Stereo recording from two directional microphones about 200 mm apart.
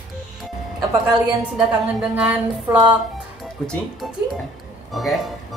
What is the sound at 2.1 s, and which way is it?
Speech, 10° right (ahead or behind).